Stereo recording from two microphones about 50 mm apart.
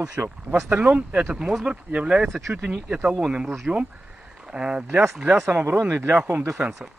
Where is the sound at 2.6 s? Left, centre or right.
Centre.